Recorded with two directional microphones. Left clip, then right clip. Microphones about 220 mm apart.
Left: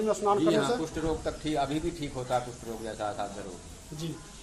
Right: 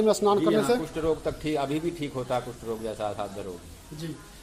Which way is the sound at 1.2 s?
45° right (ahead or behind).